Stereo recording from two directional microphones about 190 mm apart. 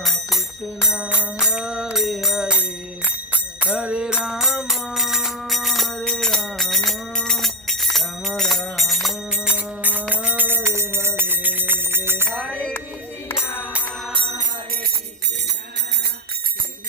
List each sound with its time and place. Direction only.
0.0 s bicycle bell: centre (ahead or behind)
0.9 s a sound: 5° right (ahead or behind)
7.9 s music: centre (ahead or behind)
12.3 s bicycle bell: 5° left (ahead or behind)
14.1 s music: 25° right (ahead or behind)